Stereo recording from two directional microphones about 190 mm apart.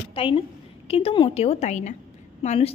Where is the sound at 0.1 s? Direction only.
30° left (ahead or behind).